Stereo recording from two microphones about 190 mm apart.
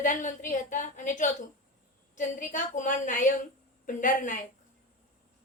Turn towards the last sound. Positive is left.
turn(degrees=45)  # may be behind; listen again after turning